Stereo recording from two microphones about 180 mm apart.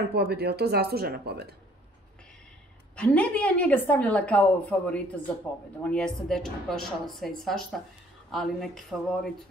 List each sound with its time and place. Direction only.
0.1 s speech: 65° right (ahead or behind)
3.0 s a woman's voice: 10° left (ahead or behind)